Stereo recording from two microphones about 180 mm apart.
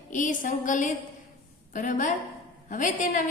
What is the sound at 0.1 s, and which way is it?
A woman's voice, 45° left (ahead or behind).